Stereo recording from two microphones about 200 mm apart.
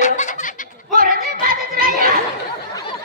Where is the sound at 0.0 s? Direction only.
35° left (ahead or behind).